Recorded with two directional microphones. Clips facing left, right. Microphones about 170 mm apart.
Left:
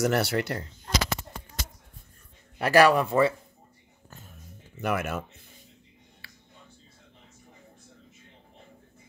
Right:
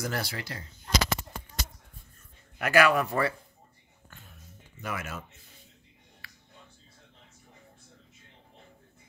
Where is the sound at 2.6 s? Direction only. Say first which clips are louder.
Left 4 dB; 35° left (ahead or behind).